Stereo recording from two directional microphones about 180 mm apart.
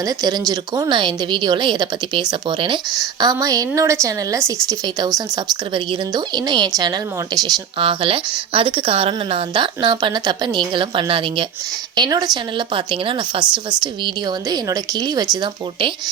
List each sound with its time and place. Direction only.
0.0 s speech: 20° right (ahead or behind)